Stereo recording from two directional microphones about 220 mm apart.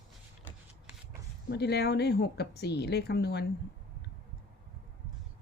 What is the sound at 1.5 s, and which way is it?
Speech, 50° left (ahead or behind).